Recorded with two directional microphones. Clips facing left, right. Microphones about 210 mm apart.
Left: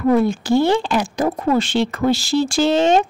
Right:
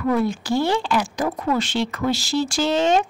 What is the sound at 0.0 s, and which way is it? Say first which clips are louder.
A woman's voice: left 5 dB; 25° left (ahead or behind).